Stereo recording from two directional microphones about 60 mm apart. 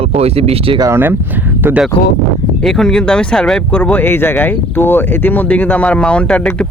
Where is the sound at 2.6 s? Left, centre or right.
Centre.